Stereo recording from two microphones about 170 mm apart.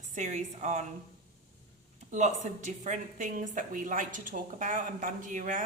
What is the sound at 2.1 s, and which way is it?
A woman's voice, 45° right (ahead or behind).